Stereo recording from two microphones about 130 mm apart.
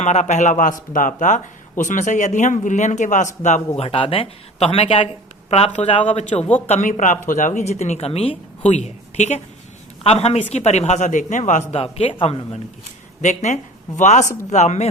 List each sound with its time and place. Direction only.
0.0 s speech: 60° left (ahead or behind)
3.8 s speech: 45° left (ahead or behind)
6.1 s a man's voice: 65° left (ahead or behind); by 8.7 s 50° left (ahead or behind)
8.7 s a man's voice: 60° left (ahead or behind)
11.7 s speech: 50° left (ahead or behind)
13.2 s a man's voice: 65° left (ahead or behind)